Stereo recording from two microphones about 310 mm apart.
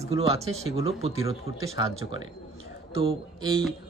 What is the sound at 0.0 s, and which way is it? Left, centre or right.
Speech, centre.